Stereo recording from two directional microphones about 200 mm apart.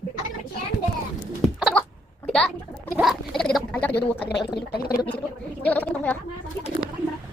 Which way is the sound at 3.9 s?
55° left (ahead or behind).